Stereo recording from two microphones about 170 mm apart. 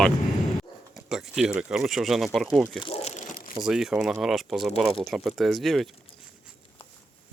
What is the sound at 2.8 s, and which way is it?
Crumpling, 40° left (ahead or behind).